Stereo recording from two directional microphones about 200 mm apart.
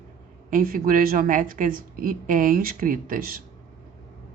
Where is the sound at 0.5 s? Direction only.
45° right (ahead or behind).